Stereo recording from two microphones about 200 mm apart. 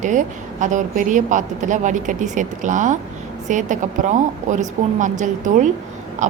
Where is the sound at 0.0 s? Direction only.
40° right (ahead or behind).